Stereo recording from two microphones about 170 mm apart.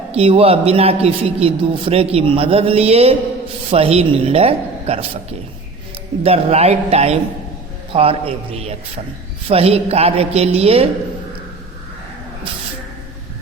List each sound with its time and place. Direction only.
0.1 s a man's voice: 35° right (ahead or behind)
6.2 s a man's voice: 35° right (ahead or behind)